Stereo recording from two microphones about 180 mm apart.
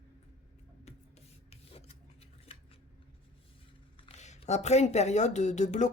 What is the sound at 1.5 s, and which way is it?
Filing, 30° left (ahead or behind).